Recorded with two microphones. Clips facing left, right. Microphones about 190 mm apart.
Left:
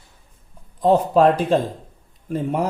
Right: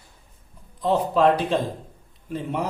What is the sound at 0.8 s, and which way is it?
Speech, 45° left (ahead or behind).